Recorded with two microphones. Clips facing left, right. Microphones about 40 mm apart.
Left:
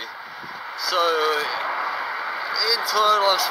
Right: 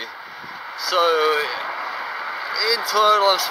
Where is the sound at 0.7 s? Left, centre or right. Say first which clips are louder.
Right 3 dB; centre.